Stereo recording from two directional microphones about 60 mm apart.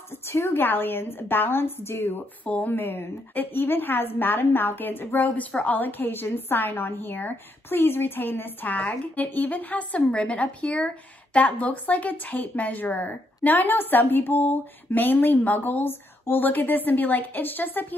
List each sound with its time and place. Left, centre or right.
0.1 s a woman's voice: left
2.4 s a woman's voice: left